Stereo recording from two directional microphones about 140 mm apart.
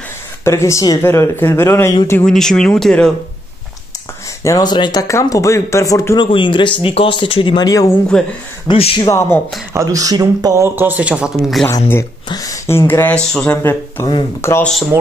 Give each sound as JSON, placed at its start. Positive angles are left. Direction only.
{"t": 0.5, "sound": "speech", "side_deg": 20}
{"t": 2.2, "sound": "speech", "side_deg": 5}
{"t": 4.4, "sound": "speech", "side_deg": 25}
{"t": 6.2, "sound": "speech", "side_deg": 35}
{"t": 7.6, "sound": "speech", "side_deg": 25}
{"t": 8.1, "sound": "speech", "side_deg": 5}
{"t": 8.6, "sound": "speech", "side_deg": 40}
{"t": 9.0, "sound": "speech", "side_deg": 20}
{"t": 9.8, "sound": "speech", "side_deg": -25}
{"t": 12.3, "sound": "speech", "side_deg": 25}
{"t": 14.6, "sound": "speech", "side_deg": 0}